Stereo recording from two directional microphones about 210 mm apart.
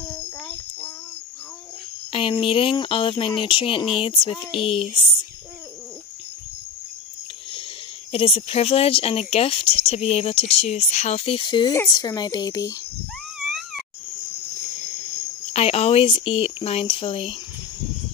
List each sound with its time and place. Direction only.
2.1 s speech: 25° left (ahead or behind)
8.1 s speech: 25° left (ahead or behind)
13.5 s wheeze: centre (ahead or behind)
15.5 s speech: 30° left (ahead or behind)